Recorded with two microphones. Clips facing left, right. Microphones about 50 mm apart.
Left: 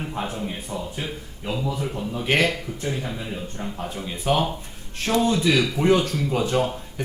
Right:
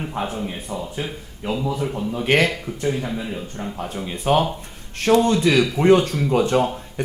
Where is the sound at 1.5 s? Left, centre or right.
Right.